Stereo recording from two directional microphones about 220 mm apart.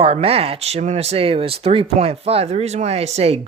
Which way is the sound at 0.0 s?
25° right (ahead or behind).